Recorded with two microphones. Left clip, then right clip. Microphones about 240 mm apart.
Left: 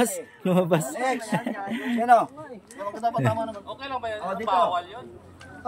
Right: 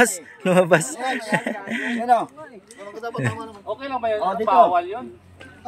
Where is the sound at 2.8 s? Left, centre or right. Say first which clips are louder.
Left 3 dB; centre.